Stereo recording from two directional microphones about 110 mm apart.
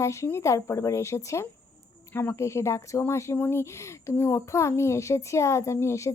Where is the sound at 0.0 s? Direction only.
25° left (ahead or behind).